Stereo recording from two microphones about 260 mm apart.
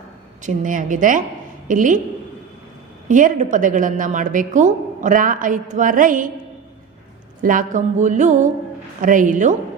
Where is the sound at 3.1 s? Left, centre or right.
Right.